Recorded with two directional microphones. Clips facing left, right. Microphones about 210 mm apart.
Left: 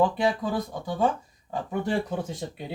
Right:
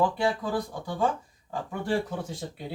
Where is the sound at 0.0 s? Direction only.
20° left (ahead or behind).